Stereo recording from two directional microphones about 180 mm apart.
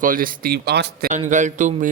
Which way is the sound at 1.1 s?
45° right (ahead or behind).